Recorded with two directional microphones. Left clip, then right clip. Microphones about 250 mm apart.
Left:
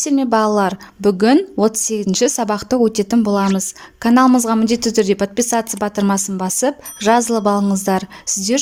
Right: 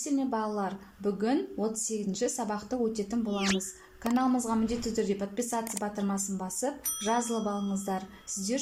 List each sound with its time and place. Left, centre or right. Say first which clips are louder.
0.0 s a woman's voice: left 16 dB; left